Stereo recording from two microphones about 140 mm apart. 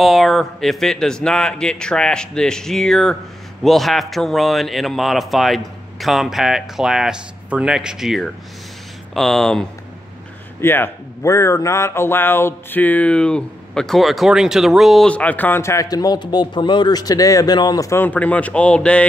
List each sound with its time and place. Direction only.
0.0 s speech: centre (ahead or behind)
10.6 s speech: 15° left (ahead or behind)